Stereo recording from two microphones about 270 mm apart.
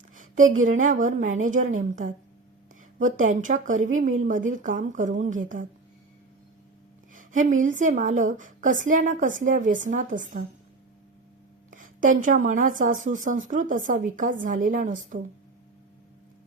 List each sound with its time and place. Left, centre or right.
0.6 s a woman's voice: right
3.8 s a woman's voice: right
4.2 s a woman's voice: right
7.1 s a woman's voice: right
11.7 s a woman's voice: right